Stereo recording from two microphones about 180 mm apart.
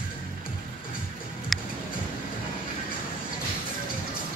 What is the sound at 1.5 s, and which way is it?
Music, centre (ahead or behind).